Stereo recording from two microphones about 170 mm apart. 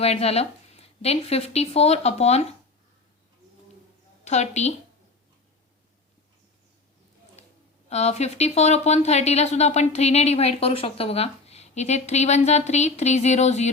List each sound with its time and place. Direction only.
0.0 s speech: 35° left (ahead or behind)
4.2 s a woman's voice: 40° left (ahead or behind)
7.9 s speech: 40° left (ahead or behind)